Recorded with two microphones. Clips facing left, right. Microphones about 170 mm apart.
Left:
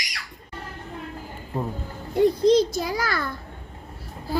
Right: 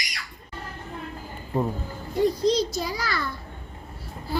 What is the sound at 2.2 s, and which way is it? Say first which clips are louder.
A child's voice: left 4 dB; 55° left (ahead or behind).